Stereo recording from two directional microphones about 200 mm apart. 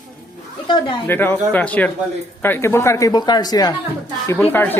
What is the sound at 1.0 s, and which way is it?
Speech, 10° left (ahead or behind).